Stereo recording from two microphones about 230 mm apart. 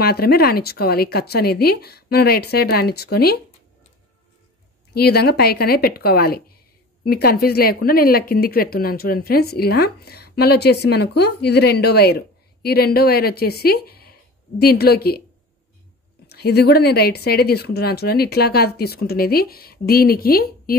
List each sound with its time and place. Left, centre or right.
0.0 s speech: left
4.9 s speech: left
16.3 s speech: left